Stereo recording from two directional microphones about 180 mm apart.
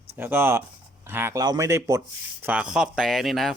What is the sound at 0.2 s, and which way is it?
Speech, 10° right (ahead or behind).